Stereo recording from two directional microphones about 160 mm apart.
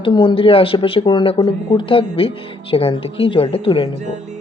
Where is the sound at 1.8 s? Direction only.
35° left (ahead or behind).